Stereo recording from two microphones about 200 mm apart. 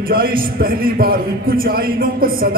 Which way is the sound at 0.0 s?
45° right (ahead or behind).